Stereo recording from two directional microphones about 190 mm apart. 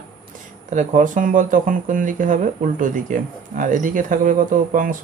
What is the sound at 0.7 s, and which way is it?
Speech, 40° right (ahead or behind).